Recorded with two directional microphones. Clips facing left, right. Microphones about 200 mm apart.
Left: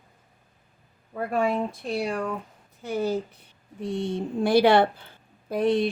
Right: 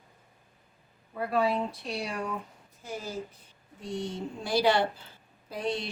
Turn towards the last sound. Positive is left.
turn(degrees=55)  # may be behind; listen again after turning